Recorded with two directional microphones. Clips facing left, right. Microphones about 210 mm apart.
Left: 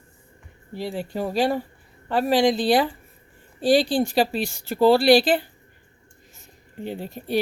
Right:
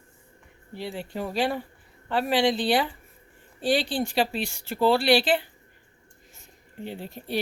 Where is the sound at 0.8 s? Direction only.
40° left (ahead or behind).